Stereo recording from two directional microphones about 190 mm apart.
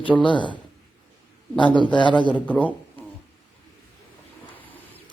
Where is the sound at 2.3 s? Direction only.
10° left (ahead or behind).